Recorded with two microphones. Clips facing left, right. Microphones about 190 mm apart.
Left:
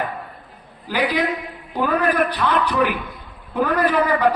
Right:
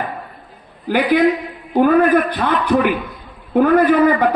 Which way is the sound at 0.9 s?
55° right (ahead or behind).